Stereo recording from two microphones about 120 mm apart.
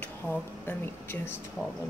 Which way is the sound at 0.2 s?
15° left (ahead or behind).